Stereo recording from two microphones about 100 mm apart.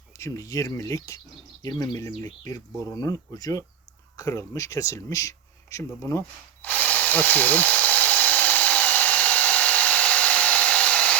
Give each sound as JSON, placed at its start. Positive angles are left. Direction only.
{"t": 0.2, "sound": "speech", "side_deg": 35}
{"t": 6.6, "sound": "drill", "side_deg": 15}